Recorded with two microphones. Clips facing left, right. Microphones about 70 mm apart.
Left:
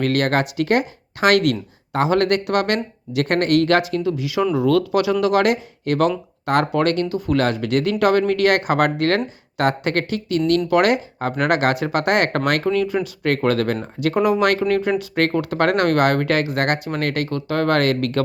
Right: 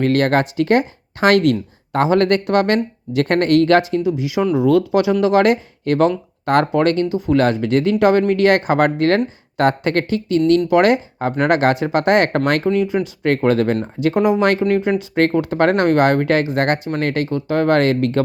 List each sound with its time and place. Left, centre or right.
0.0 s speech: right